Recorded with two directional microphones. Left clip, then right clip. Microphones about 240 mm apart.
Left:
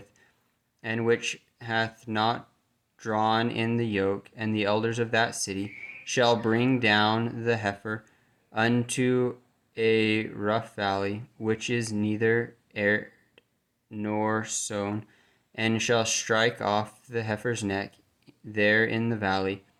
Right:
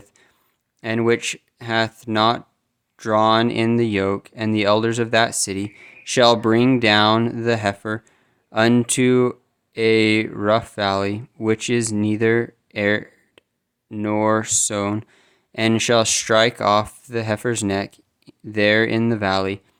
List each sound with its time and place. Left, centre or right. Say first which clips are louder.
0.8 s speech: right 6 dB; right